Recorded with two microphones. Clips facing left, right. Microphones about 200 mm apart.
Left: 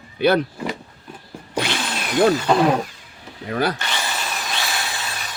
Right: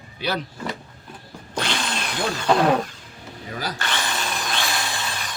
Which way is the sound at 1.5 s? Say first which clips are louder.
Left 2 dB; 10° left (ahead or behind).